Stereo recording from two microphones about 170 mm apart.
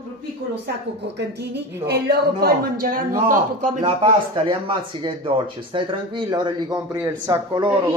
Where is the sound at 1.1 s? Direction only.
80° right.